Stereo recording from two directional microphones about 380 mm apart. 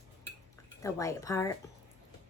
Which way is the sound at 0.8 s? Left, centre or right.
Centre.